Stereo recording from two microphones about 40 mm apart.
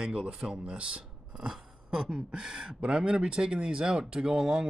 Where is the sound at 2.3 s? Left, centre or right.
Centre.